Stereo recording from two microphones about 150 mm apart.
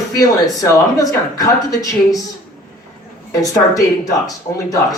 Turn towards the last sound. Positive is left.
turn(degrees=25)  # may be behind; listen again after turning